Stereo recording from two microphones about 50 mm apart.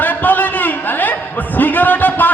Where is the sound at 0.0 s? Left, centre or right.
Left.